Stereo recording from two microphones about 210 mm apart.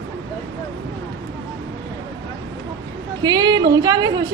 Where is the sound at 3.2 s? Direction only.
20° right (ahead or behind).